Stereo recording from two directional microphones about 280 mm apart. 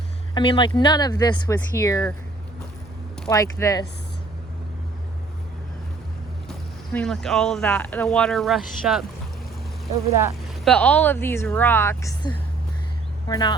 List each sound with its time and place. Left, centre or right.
0.3 s speech: centre
3.2 s speech: centre
6.5 s speech: centre
10.6 s speech: centre